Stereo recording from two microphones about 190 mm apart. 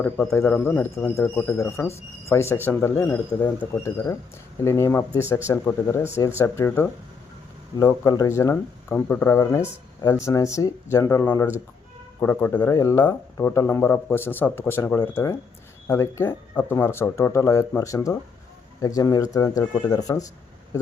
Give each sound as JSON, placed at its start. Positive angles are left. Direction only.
{"t": 0.0, "sound": "speech", "side_deg": 10}